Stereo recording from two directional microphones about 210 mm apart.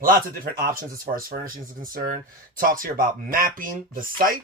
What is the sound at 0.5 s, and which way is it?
Speech, 45° right (ahead or behind).